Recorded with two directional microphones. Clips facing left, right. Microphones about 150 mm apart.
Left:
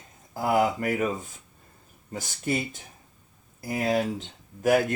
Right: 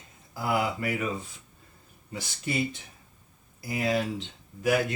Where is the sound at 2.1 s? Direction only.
45° left (ahead or behind).